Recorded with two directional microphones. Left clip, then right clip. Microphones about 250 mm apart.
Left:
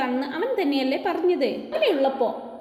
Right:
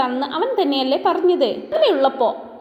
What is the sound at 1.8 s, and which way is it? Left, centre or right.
Speech, centre.